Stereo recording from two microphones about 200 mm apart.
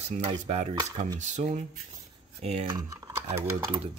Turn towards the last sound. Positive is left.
turn(degrees=-10)  # may be behind; listen again after turning